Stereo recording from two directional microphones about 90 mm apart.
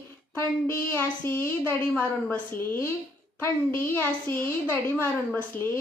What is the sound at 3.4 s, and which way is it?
A woman's voice, 25° left (ahead or behind).